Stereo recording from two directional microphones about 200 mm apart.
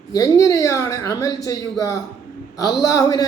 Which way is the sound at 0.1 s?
15° left (ahead or behind).